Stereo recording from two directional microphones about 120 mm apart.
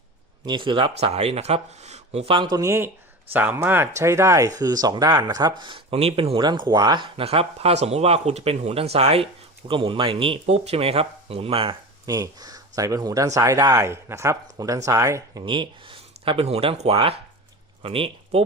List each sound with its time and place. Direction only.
0.4 s speech: 45° right (ahead or behind); by 2.3 s 65° right (ahead or behind)
2.3 s speech: 40° right (ahead or behind)
2.6 s speech: 20° right (ahead or behind); by 5.8 s 40° right (ahead or behind)
5.9 s speech: 60° right (ahead or behind)
9.6 s speech: 45° right (ahead or behind)
10.4 s speech: 60° right (ahead or behind)
12.0 s speech: 30° right (ahead or behind)
15.4 s speech: 40° right (ahead or behind)